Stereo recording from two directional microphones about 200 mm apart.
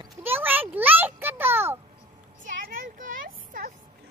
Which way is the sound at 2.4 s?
40° right (ahead or behind).